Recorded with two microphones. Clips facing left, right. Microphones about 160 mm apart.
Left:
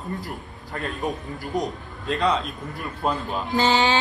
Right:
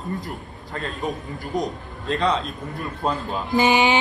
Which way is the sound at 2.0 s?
Centre (ahead or behind).